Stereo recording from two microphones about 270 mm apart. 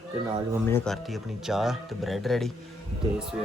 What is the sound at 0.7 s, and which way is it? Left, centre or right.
Speech, centre.